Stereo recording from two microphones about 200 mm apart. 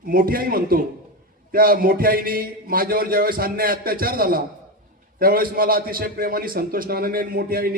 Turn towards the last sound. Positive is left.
turn(degrees=-50)  # may be behind; listen again after turning